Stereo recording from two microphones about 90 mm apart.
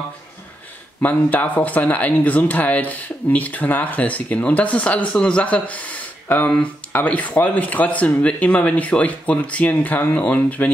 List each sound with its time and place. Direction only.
1.0 s speech: 20° left (ahead or behind)